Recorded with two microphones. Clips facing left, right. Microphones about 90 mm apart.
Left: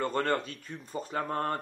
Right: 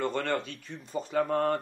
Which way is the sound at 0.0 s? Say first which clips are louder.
Left 1 dB; 40° left (ahead or behind).